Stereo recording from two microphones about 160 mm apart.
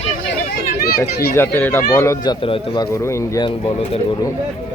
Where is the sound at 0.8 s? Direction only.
70° left (ahead or behind).